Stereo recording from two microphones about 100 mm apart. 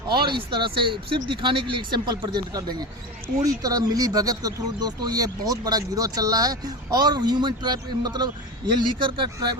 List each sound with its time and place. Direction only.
0.3 s speech: 55° right (ahead or behind)
9.0 s speech: 55° right (ahead or behind)